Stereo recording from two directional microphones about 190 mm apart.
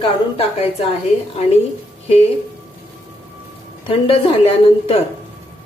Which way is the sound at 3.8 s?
30° left (ahead or behind).